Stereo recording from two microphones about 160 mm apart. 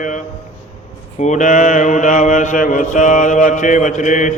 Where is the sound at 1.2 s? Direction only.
50° left (ahead or behind).